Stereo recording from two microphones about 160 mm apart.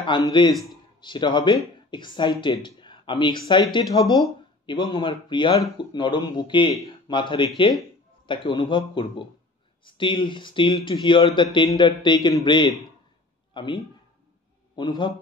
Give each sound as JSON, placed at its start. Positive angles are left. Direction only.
{"t": 0.0, "sound": "speech", "side_deg": 30}
{"t": 0.5, "sound": "speech", "side_deg": 0}
{"t": 1.0, "sound": "speech", "side_deg": 30}
{"t": 3.8, "sound": "speech", "side_deg": 0}
{"t": 4.6, "sound": "speech", "side_deg": 30}
{"t": 13.5, "sound": "a sound", "side_deg": 30}
{"t": 14.8, "sound": "speech", "side_deg": 30}